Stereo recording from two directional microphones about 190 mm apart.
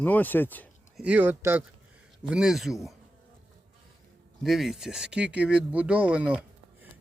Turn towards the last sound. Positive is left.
turn(degrees=-5)  # may be behind; listen again after turning